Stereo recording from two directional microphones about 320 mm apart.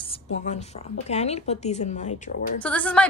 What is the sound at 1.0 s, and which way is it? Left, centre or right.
Speech, centre.